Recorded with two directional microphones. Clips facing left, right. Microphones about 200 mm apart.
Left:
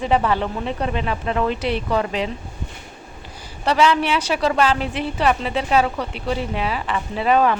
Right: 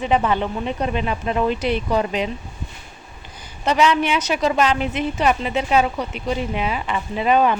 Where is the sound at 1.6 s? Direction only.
30° left (ahead or behind).